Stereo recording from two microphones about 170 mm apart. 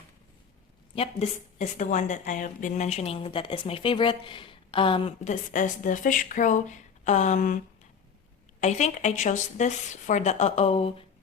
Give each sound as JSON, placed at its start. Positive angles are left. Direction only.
{"t": 0.9, "sound": "a woman's voice", "side_deg": 35}
{"t": 8.6, "sound": "a woman's voice", "side_deg": 45}